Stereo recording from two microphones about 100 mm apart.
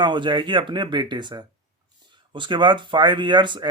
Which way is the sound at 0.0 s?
50° right (ahead or behind).